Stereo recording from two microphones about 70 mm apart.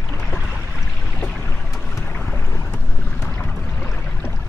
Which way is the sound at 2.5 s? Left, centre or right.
Left.